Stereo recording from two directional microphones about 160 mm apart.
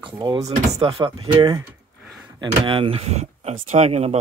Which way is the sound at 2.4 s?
30° right (ahead or behind).